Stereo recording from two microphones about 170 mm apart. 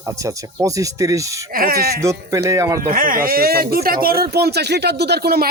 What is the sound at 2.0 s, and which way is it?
Speech, 20° right (ahead or behind).